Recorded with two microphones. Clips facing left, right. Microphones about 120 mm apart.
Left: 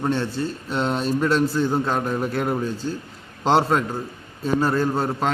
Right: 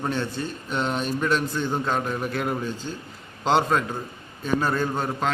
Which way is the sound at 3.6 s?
10° left (ahead or behind).